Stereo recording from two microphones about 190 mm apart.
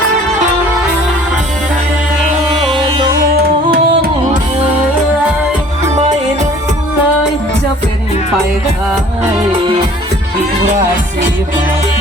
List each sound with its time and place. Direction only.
3.3 s music: 50° right (ahead or behind)
5.9 s music: 35° right (ahead or behind)
9.5 s music: 25° right (ahead or behind)